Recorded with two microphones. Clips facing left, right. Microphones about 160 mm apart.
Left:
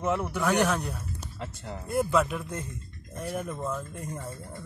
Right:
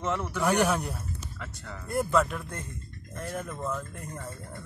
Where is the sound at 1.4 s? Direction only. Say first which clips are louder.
Left 4 dB; 30° left (ahead or behind).